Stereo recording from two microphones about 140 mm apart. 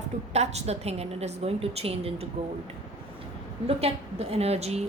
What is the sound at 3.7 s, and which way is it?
A woman's voice, 45° right (ahead or behind).